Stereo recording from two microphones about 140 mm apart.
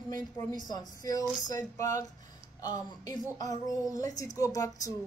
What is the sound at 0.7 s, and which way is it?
A woman's voice, 25° left (ahead or behind).